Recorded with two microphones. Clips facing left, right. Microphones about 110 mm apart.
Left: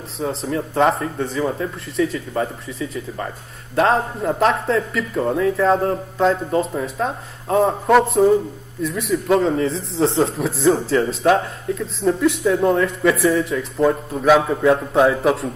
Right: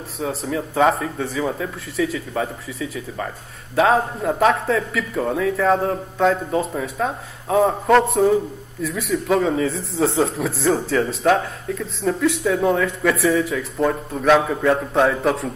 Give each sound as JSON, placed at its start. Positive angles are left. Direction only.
{"t": 0.2, "sound": "a man's voice", "side_deg": 0}